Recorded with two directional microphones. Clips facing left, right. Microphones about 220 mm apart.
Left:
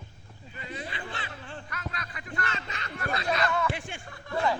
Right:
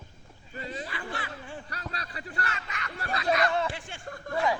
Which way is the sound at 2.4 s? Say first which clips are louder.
Left 1 dB; 25° left (ahead or behind).